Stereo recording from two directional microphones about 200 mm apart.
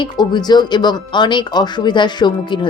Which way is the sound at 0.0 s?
20° left (ahead or behind).